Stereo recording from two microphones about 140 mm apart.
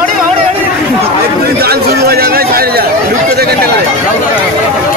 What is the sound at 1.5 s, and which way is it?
Chatter, 90° right.